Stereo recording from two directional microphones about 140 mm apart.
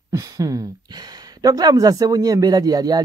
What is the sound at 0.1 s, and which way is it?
Speech, 25° right (ahead or behind).